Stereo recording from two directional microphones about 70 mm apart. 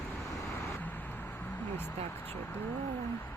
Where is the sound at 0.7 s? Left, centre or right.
Left.